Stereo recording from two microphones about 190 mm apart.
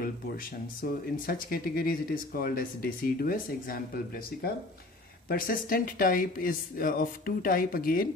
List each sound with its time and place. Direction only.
1.1 s speech: 50° left (ahead or behind)